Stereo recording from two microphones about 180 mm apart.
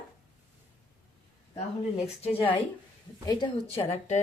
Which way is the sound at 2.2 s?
30° left (ahead or behind).